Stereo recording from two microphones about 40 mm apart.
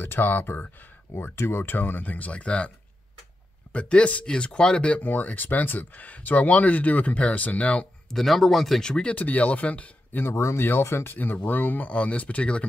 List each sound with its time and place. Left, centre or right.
0.0 s speech: left
1.1 s speech: left
1.8 s speech: left
3.7 s speech: left
4.3 s speech: left
5.0 s speech: left
8.1 s speech: centre
8.8 s speech: centre
9.1 s speech: left
10.1 s speech: left
11.1 s speech: left
11.9 s speech: left